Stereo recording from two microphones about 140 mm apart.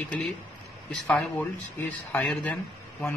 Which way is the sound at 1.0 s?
5° left (ahead or behind).